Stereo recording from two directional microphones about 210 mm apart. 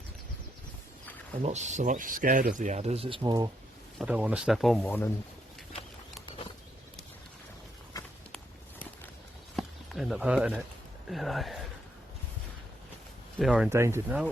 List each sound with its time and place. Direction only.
1.4 s speech: 35° right (ahead or behind)
3.9 s speech: 5° right (ahead or behind)
7.9 s a sound: 15° left (ahead or behind)
9.6 s a sound: centre (ahead or behind)
11.1 s speech: centre (ahead or behind)
13.4 s speech: centre (ahead or behind)
13.7 s speech: 10° right (ahead or behind)